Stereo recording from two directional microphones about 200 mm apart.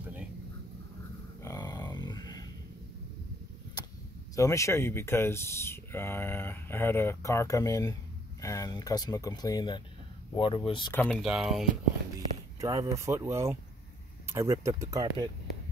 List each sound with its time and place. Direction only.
1.4 s a sound: 15° left (ahead or behind)
4.4 s speech: 15° left (ahead or behind)
10.9 s speech: 5° left (ahead or behind)
12.5 s speech: 15° right (ahead or behind)